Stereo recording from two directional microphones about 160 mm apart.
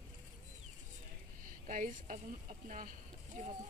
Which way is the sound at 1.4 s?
55° right (ahead or behind).